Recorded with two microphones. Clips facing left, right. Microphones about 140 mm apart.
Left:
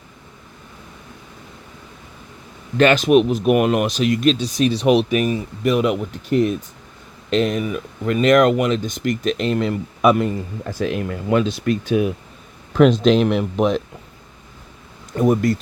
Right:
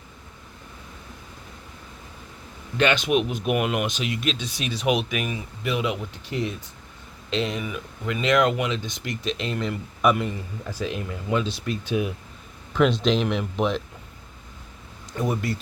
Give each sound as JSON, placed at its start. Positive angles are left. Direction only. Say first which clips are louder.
{"t": 2.7, "sound": "speech", "louder": "left 8 dB", "side_deg": 45}
{"t": 10.2, "sound": "speech", "louder": "left 7 dB", "side_deg": 75}
{"t": 15.1, "sound": "speech", "louder": "left 9 dB", "side_deg": 50}